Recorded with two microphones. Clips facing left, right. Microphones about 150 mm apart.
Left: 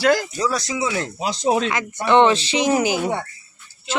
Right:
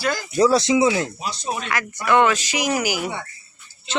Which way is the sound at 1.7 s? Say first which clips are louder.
Left 2 dB; 25° left (ahead or behind).